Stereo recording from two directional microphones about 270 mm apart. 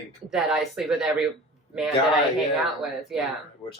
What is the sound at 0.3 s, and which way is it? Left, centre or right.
Speech, centre.